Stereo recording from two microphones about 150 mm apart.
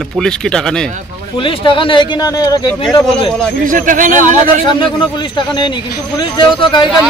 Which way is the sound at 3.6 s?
60° right (ahead or behind).